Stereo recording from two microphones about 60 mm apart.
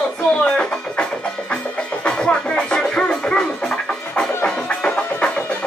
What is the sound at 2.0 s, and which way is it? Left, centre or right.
Music, centre.